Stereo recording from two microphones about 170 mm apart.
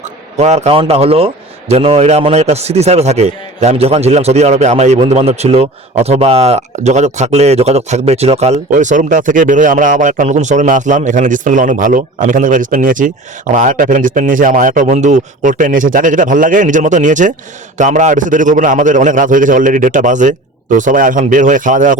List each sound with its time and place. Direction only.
0.3 s a man's voice: 40° right (ahead or behind)